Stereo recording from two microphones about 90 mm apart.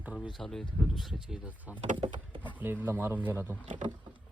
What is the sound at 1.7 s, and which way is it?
Speech, 70° right (ahead or behind).